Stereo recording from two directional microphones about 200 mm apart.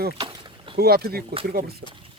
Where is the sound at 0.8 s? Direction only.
50° right (ahead or behind).